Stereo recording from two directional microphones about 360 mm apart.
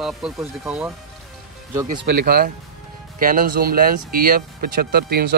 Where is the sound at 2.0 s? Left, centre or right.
Right.